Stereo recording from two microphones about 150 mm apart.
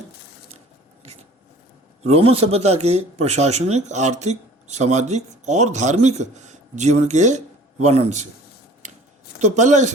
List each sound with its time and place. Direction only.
2.0 s speech: 40° right (ahead or behind)
9.4 s speech: 50° right (ahead or behind)